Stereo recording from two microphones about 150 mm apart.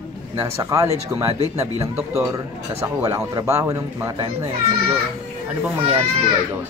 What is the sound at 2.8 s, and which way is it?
Speech, 20° right (ahead or behind).